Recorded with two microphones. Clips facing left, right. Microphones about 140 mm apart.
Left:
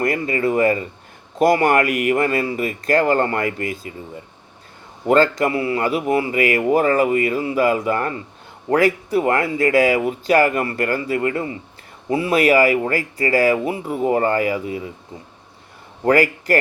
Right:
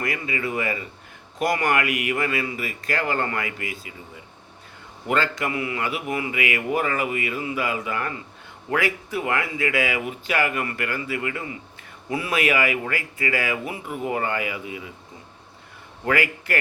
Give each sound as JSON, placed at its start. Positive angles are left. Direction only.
{"t": 0.0, "sound": "a man's voice", "side_deg": 45}
{"t": 5.0, "sound": "a man's voice", "side_deg": 40}
{"t": 16.0, "sound": "a man's voice", "side_deg": 40}